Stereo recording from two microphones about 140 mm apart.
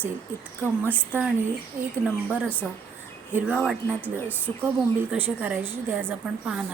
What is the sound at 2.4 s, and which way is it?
Speech, 10° left (ahead or behind).